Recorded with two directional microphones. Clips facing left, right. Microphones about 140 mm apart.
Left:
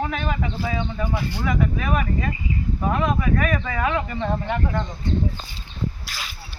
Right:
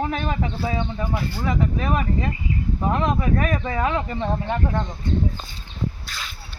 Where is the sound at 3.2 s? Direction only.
30° right (ahead or behind).